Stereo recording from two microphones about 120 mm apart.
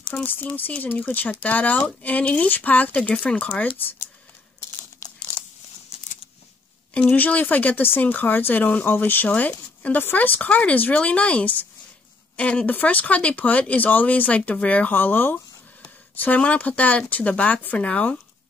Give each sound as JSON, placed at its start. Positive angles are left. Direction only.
{"t": 0.1, "sound": "speech", "side_deg": 15}
{"t": 4.6, "sound": "crumpling", "side_deg": 20}
{"t": 6.9, "sound": "speech", "side_deg": 10}